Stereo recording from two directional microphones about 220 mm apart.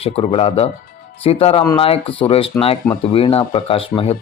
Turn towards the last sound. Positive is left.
turn(degrees=25)  # may be behind; listen again after turning